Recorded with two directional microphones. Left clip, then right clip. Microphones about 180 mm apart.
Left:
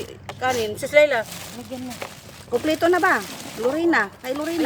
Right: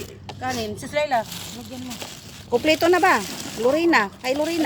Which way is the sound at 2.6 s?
15° right (ahead or behind).